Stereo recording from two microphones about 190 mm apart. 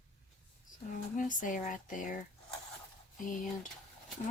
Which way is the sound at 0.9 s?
45° left (ahead or behind).